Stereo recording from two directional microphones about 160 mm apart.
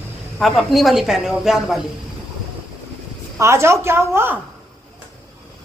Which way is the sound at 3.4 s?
15° right (ahead or behind).